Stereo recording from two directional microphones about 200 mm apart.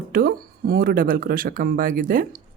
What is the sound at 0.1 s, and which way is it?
Speech, 45° right (ahead or behind).